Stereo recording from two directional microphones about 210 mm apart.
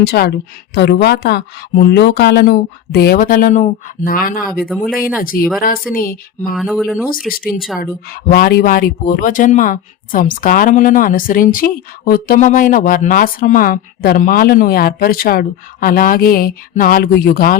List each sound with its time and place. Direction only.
0.0 s speech: 50° left (ahead or behind)
6.6 s speech: centre (ahead or behind)
7.3 s speech: 45° left (ahead or behind)